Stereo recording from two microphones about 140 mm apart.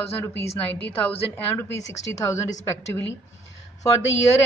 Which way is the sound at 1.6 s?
25° left (ahead or behind).